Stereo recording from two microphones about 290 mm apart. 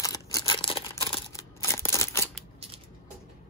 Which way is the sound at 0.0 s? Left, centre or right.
Centre.